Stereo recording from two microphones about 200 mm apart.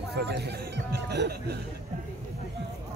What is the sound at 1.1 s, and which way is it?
Music, 55° right (ahead or behind).